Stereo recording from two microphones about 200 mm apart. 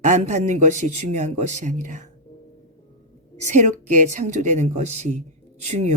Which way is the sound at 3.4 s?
40° right (ahead or behind).